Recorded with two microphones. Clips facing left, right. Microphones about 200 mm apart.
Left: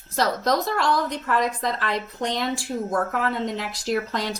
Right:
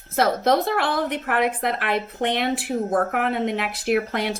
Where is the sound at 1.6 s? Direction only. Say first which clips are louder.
Right 2 dB; 60° right (ahead or behind).